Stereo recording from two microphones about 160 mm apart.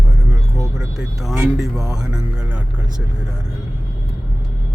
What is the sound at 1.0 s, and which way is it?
Speech, centre (ahead or behind).